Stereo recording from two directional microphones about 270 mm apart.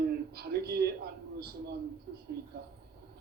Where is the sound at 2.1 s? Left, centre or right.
Right.